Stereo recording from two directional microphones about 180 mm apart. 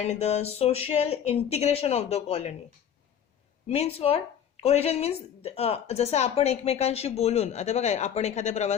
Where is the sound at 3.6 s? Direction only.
35° left (ahead or behind).